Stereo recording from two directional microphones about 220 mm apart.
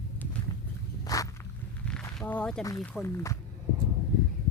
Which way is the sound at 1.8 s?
5° left (ahead or behind).